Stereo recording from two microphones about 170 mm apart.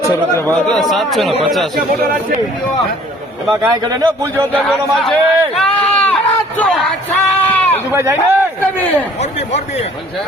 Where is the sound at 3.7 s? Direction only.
25° right (ahead or behind).